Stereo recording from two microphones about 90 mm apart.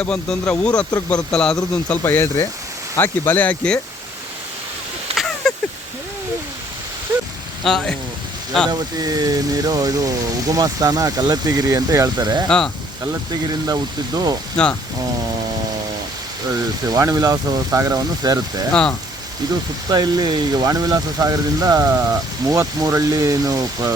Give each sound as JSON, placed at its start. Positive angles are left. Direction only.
{"t": 0.0, "sound": "speech", "side_deg": 10}
{"t": 2.0, "sound": "speech", "side_deg": 25}
{"t": 5.1, "sound": "a sound", "side_deg": 5}
{"t": 7.1, "sound": "a sound", "side_deg": -45}
{"t": 7.6, "sound": "speech", "side_deg": 5}
{"t": 8.7, "sound": "speech", "side_deg": -45}
{"t": 12.5, "sound": "speech", "side_deg": 10}
{"t": 13.7, "sound": "speech", "side_deg": -50}
{"t": 14.5, "sound": "speech", "side_deg": 10}
{"t": 16.9, "sound": "speech", "side_deg": -40}
{"t": 18.7, "sound": "speech", "side_deg": 10}
{"t": 19.9, "sound": "speech", "side_deg": -50}